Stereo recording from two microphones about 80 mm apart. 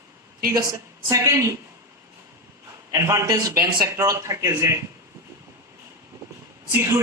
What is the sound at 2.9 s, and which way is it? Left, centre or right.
Speech, right.